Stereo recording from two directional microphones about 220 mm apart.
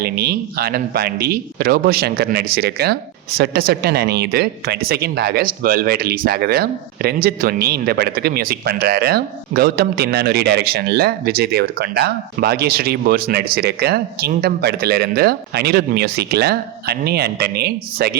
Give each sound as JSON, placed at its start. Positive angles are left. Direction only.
{"t": 0.0, "sound": "speech", "side_deg": -45}